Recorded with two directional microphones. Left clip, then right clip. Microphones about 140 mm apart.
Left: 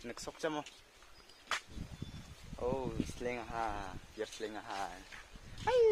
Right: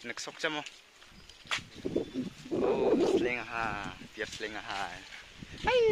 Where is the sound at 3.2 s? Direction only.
5° right (ahead or behind).